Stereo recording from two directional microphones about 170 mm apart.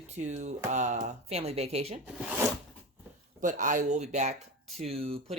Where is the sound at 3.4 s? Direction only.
50° right (ahead or behind).